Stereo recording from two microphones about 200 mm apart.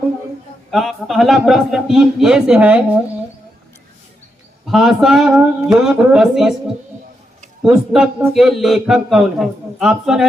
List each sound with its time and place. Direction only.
0.7 s a man's voice: centre (ahead or behind)
4.6 s a man's voice: centre (ahead or behind)
7.6 s a man's voice: 5° right (ahead or behind)